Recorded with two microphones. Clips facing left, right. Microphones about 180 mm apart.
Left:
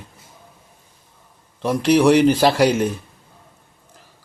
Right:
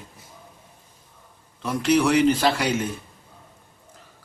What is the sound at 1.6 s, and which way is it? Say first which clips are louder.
Speech: left 5 dB; 60° left (ahead or behind).